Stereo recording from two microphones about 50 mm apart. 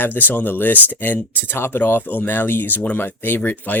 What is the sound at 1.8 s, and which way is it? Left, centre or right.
Speech, left.